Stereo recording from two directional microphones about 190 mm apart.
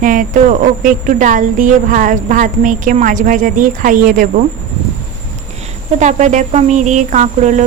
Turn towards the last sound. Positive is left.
turn(degrees=-40)  # may be behind; listen again after turning